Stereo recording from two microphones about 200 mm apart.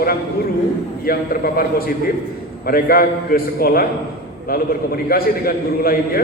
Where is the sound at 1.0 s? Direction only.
50° left (ahead or behind).